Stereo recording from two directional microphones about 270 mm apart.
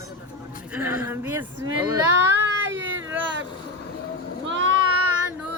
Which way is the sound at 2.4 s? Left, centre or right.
Right.